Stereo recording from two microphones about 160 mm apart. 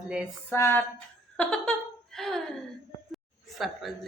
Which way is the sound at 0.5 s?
15° left (ahead or behind).